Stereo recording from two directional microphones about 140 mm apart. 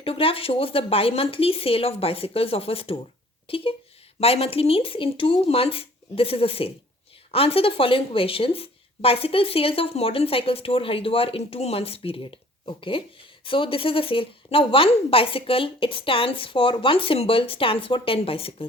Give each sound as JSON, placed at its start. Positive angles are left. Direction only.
{"t": 0.0, "sound": "a woman's voice", "side_deg": 40}